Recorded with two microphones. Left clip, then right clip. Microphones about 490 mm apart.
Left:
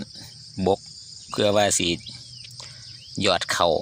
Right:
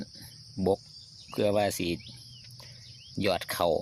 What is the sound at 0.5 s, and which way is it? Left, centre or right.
Cricket, right.